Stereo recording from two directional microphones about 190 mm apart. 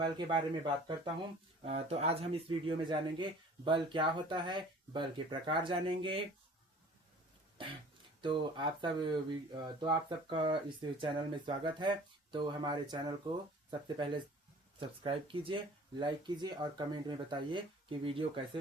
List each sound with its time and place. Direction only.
0.0 s speech: 25° right (ahead or behind)
1.6 s speech: 35° right (ahead or behind)
8.2 s speech: 25° right (ahead or behind)